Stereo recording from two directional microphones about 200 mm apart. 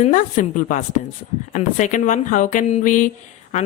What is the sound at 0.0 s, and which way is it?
Speech, 40° left (ahead or behind).